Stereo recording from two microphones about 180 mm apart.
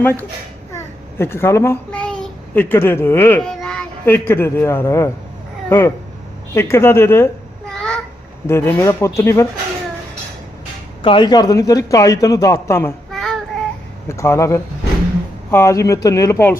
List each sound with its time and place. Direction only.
0.0 s a child's voice: 10° left (ahead or behind)
7.7 s a sound: 5° left (ahead or behind)
8.4 s speech: 15° left (ahead or behind)
11.0 s a man's voice: 25° left (ahead or behind)
13.1 s child singing: centre (ahead or behind)
14.1 s speech: 15° left (ahead or behind)